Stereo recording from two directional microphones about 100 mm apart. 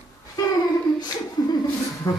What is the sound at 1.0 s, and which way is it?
Speech, 40° left (ahead or behind).